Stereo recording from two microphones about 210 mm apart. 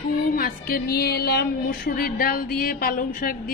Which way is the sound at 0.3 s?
45° left (ahead or behind).